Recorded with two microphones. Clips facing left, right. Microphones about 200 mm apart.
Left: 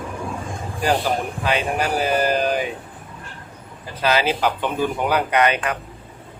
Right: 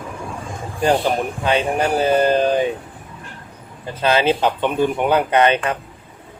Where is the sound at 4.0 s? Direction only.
25° right (ahead or behind).